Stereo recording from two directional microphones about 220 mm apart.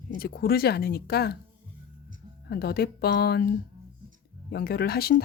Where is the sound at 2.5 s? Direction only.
45° left (ahead or behind).